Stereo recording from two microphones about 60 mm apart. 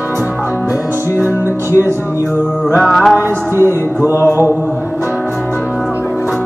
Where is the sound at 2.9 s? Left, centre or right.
Centre.